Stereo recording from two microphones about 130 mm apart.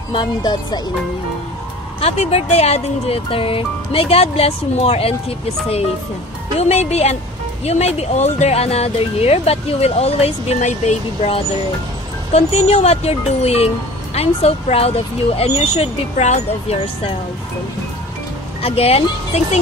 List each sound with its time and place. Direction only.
0.1 s speech: 35° left (ahead or behind)
2.0 s speech: 50° left (ahead or behind)
6.6 s a woman's voice: 55° left (ahead or behind)
12.3 s speech: 55° left (ahead or behind)
18.6 s speech: 50° left (ahead or behind)